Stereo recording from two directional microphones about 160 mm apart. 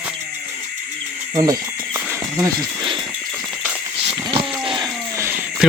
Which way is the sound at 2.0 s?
20° right (ahead or behind).